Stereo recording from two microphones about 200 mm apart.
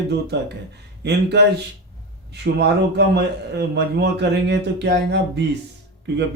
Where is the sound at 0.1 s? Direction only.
55° right (ahead or behind).